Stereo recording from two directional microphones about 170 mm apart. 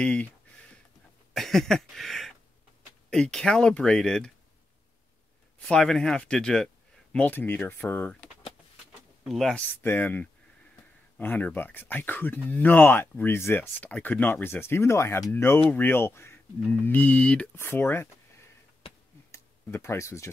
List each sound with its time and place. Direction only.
0.0 s speech: 5° left (ahead or behind)
1.3 s a sound: centre (ahead or behind)
3.1 s speech: 5° left (ahead or behind)
5.6 s speech: 5° left (ahead or behind)
19.3 s tick-tock: 15° left (ahead or behind)